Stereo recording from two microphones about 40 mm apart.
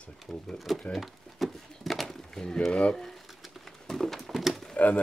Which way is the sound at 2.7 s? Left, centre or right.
Centre.